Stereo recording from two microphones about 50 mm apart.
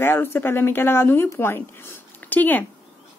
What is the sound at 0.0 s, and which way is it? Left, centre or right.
A woman's voice, left.